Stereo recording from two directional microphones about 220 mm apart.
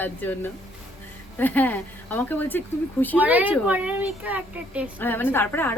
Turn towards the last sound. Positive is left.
turn(degrees=10)  # may be behind; listen again after turning